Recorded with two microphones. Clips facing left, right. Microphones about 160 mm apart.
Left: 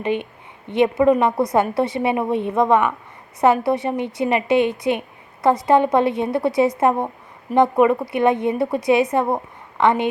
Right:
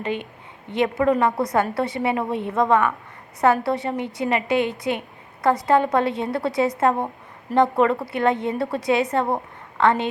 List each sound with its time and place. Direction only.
0.0 s a woman's voice: 20° left (ahead or behind)